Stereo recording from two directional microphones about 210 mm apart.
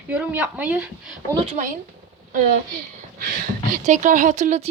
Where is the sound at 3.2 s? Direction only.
40° right (ahead or behind).